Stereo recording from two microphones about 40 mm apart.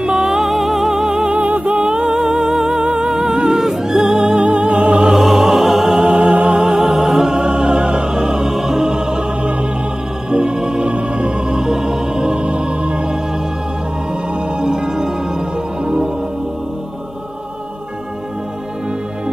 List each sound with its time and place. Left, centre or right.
0.0 s music: centre
1.3 s music: right
6.6 s music: centre; by 13.2 s right
14.6 s music: centre